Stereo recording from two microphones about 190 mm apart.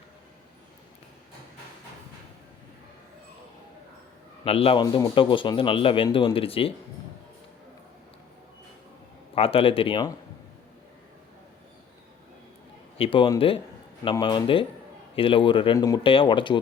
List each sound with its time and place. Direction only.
4.4 s a man's voice: 30° left (ahead or behind)
9.3 s a man's voice: 30° left (ahead or behind)
13.0 s a man's voice: 25° left (ahead or behind)